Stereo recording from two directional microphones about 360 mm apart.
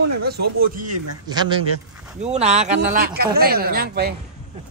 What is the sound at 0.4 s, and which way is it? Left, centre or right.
Speech, right.